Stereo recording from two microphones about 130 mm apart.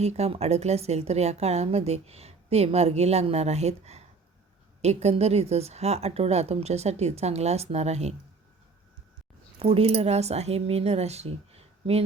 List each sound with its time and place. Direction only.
0.0 s a woman's voice: 55° right (ahead or behind)
9.6 s speech: 50° right (ahead or behind)